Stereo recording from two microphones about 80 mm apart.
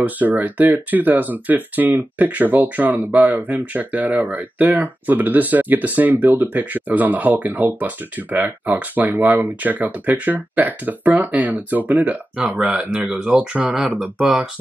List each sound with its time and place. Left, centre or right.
0.0 s speech: centre